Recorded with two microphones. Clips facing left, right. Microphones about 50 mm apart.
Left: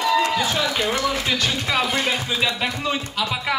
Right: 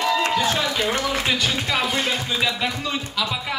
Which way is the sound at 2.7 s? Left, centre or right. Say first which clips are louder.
Left 2 dB; centre.